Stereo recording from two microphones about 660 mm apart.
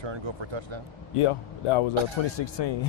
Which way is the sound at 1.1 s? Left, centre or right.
Left.